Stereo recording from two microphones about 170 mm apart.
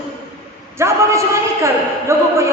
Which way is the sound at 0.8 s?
15° right (ahead or behind).